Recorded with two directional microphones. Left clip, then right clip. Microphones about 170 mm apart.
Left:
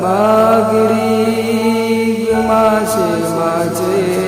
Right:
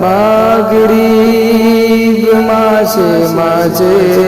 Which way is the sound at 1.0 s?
45° right (ahead or behind).